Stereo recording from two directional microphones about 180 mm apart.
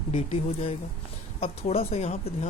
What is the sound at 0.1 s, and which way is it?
Speech, 35° left (ahead or behind).